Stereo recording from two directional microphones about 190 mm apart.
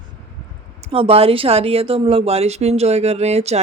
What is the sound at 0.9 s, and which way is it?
A woman's voice, 30° right (ahead or behind).